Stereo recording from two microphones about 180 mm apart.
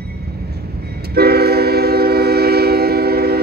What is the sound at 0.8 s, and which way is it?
Train, 60° right (ahead or behind).